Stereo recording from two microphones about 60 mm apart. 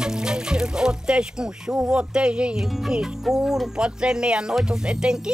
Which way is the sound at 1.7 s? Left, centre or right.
Right.